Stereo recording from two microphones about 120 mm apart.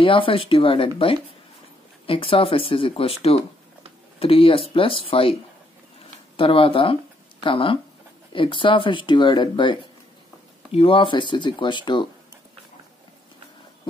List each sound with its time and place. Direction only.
0.0 s speech: 45° left (ahead or behind)
6.3 s speech: 50° left (ahead or behind)
10.7 s speech: 50° left (ahead or behind)